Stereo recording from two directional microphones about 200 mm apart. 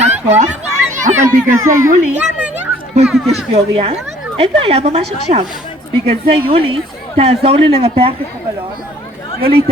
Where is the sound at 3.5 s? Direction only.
30° right (ahead or behind).